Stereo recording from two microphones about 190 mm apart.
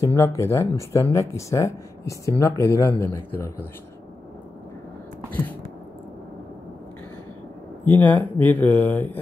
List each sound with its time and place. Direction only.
0.0 s speech: 15° left (ahead or behind)
7.8 s speech: 10° left (ahead or behind)